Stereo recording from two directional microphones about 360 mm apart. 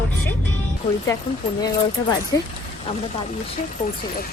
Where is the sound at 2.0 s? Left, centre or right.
Centre.